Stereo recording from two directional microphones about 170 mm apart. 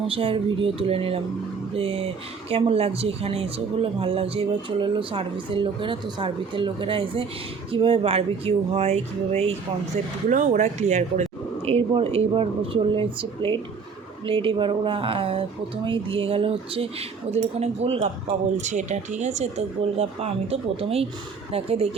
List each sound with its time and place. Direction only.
0.1 s speech: 30° right (ahead or behind)
10.2 s speech: 50° right (ahead or behind)